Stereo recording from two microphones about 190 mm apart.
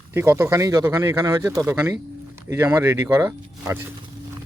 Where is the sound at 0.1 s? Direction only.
15° right (ahead or behind).